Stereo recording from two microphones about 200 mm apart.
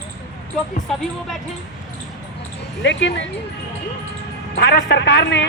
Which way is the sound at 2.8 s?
65° left (ahead or behind).